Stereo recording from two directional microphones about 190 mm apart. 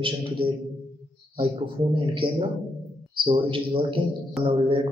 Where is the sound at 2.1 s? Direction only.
25° right (ahead or behind).